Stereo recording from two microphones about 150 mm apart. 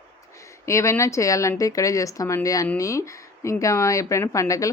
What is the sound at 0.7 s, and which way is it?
Speech, 20° left (ahead or behind).